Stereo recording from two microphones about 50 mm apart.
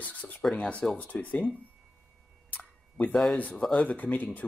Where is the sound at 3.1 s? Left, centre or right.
Centre.